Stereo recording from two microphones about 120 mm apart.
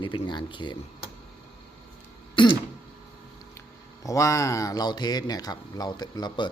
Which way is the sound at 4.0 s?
25° left (ahead or behind).